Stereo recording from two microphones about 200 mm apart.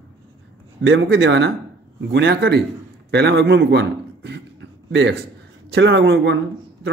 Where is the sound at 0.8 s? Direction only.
60° right (ahead or behind).